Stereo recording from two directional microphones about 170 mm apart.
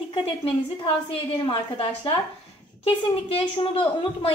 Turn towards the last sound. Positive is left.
turn(degrees=35)  # may be behind; listen again after turning